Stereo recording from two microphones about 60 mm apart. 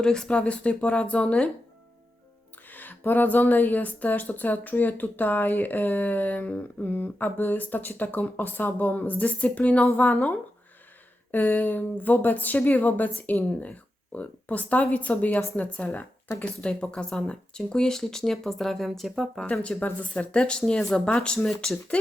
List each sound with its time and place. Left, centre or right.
0.0 s speech: centre
2.6 s speech: left; by 19.5 s centre
19.5 s speech: left